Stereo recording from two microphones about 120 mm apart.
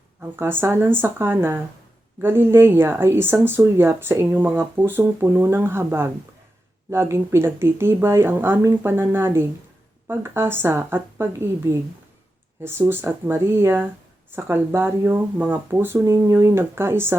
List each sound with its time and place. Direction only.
0.2 s speech: 20° right (ahead or behind)
12.9 s speech: 20° right (ahead or behind)